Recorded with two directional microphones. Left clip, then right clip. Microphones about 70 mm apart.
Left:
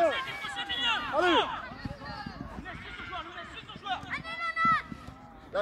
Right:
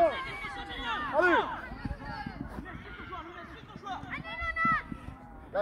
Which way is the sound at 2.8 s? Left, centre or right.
Left.